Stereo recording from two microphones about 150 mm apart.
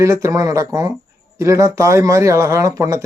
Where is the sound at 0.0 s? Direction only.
20° right (ahead or behind).